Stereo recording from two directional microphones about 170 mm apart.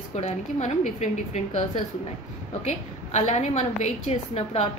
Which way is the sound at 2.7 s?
45° left (ahead or behind).